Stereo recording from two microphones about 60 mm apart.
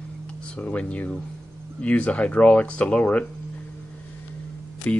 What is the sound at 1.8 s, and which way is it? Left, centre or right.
Speech, left.